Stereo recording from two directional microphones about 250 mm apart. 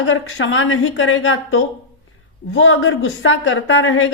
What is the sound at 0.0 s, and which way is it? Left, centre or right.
A woman's voice, left.